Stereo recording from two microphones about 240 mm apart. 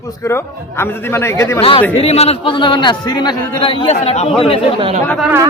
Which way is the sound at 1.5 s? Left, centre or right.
Left.